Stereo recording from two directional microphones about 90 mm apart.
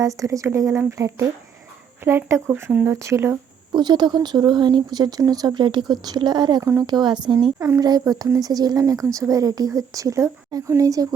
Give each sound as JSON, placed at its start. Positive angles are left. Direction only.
{"t": 0.0, "sound": "a woman's voice", "side_deg": -35}
{"t": 3.7, "sound": "speech", "side_deg": -55}
{"t": 6.6, "sound": "a woman's voice", "side_deg": -30}
{"t": 6.8, "sound": "speech", "side_deg": -55}
{"t": 7.8, "sound": "a woman's voice", "side_deg": -45}